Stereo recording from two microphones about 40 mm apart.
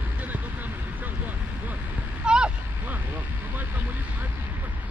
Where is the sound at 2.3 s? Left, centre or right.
Right.